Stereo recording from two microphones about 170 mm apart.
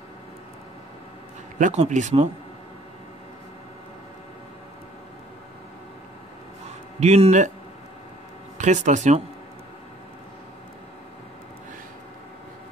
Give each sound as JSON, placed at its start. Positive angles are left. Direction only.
{"t": 1.6, "sound": "speech", "side_deg": -45}
{"t": 7.0, "sound": "speech", "side_deg": -40}
{"t": 8.5, "sound": "speech", "side_deg": -45}